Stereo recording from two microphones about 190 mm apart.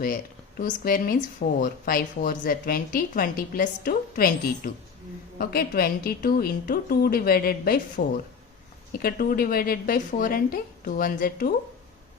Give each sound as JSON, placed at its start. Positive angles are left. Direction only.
{"t": 0.6, "sound": "speech", "side_deg": 50}